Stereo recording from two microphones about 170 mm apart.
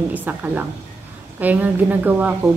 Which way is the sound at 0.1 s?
10° right (ahead or behind).